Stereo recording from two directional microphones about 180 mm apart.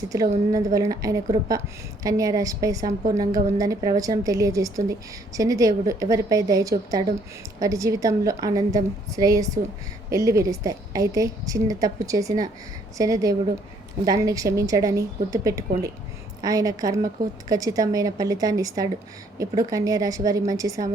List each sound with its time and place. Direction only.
0.1 s a woman's voice: 20° right (ahead or behind)